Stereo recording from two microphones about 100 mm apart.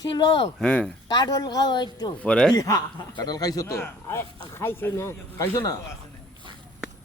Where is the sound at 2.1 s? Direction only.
10° left (ahead or behind).